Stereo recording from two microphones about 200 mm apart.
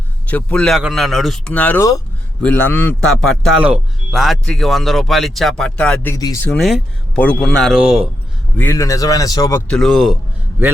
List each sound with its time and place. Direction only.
0.3 s a man's voice: 5° left (ahead or behind)
8.5 s speech: 10° left (ahead or behind)
9.6 s a man's voice: centre (ahead or behind)